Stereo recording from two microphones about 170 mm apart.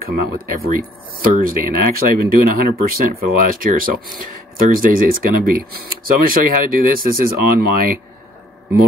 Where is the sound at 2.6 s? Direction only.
55° right (ahead or behind).